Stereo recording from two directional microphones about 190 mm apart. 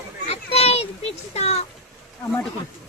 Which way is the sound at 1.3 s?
35° left (ahead or behind).